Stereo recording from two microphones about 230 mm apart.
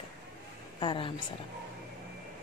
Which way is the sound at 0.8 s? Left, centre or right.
Left.